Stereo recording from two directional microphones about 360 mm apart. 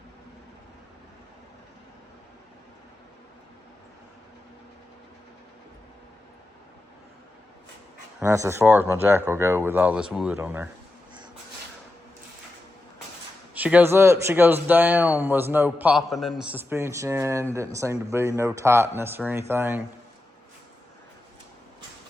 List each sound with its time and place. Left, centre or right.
8.2 s speech: centre
13.5 s speech: centre